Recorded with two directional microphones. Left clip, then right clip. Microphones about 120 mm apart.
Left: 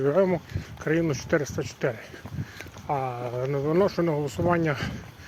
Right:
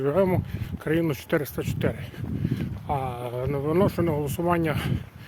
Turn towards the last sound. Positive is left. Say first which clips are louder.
# even
turn(degrees=-30)  # may be behind; listen again after turning